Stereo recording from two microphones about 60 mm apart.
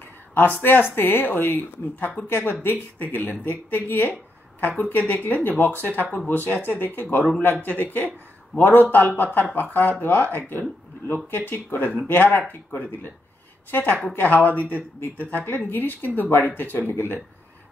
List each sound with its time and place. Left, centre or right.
0.3 s speech: left